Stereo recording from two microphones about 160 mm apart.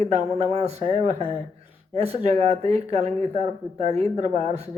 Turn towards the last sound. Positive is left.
turn(degrees=-40)  # may be behind; listen again after turning